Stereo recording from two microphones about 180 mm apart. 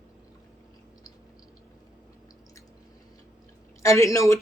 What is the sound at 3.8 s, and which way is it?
Speech, 15° left (ahead or behind).